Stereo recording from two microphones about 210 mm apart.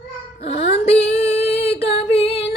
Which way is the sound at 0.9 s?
30° left (ahead or behind).